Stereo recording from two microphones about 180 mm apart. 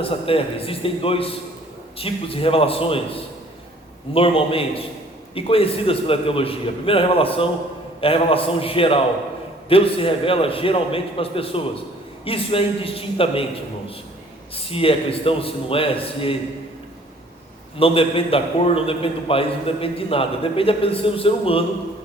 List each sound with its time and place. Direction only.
0.0 s a man's voice: 30° left (ahead or behind)
14.5 s a man's voice: 30° left (ahead or behind)
17.7 s a man's voice: 30° left (ahead or behind)